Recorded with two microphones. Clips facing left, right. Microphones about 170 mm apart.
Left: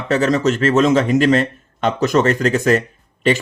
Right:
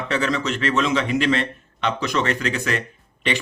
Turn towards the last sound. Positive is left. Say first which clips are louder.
# left 8 dB
turn(degrees=40)  # may be behind; listen again after turning